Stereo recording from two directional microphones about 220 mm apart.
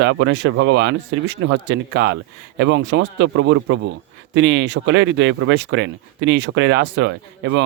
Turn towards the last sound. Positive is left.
turn(degrees=-55)  # may be behind; listen again after turning